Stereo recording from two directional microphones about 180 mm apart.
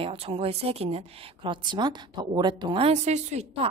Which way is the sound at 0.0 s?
30° right (ahead or behind).